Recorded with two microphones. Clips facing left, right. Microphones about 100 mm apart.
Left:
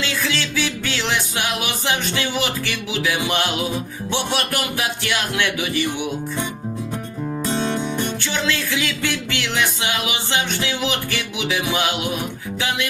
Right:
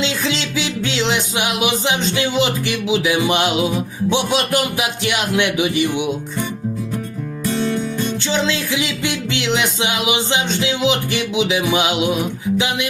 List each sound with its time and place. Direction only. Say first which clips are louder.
0.0 s music: right 3 dB; 20° right (ahead or behind)
7.4 s music: right 3 dB; 25° left (ahead or behind)
8.3 s music: right 5 dB; 20° right (ahead or behind)